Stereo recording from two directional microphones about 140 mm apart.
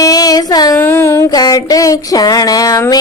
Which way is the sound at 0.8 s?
15° left (ahead or behind).